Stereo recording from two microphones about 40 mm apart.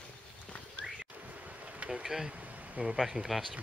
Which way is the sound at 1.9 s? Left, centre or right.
Centre.